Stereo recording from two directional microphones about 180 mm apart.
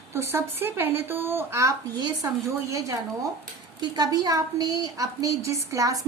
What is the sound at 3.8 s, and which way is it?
A woman's voice, 20° right (ahead or behind).